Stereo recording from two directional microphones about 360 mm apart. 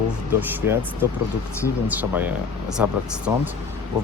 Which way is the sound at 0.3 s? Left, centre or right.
Centre.